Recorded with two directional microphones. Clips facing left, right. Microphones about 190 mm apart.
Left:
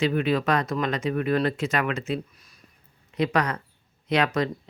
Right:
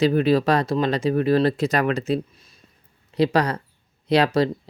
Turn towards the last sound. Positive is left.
turn(degrees=-35)  # may be behind; listen again after turning